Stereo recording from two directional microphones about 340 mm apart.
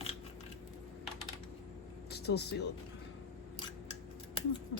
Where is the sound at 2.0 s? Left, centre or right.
Left.